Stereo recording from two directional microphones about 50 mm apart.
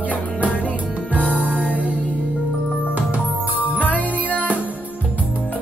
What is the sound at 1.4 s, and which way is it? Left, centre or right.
Music, left.